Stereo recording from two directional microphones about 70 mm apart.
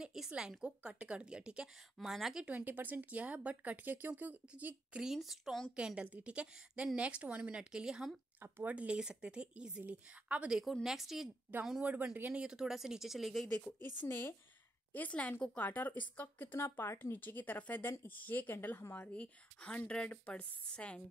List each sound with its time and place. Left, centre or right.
0.0 s a sound: centre
0.3 s speech: centre
2.0 s speech: centre
2.4 s speech: right
4.9 s speech: centre
5.8 s speech: centre
8.4 s speech: right
10.6 s speech: centre
11.5 s speech: right
12.4 s speech: centre
13.5 s speech: centre
13.9 s speech: left
16.6 s speech: left
18.9 s speech: centre